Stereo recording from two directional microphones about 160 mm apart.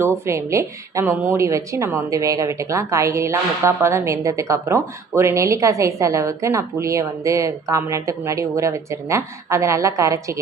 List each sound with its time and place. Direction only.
0.0 s a woman's voice: 15° right (ahead or behind)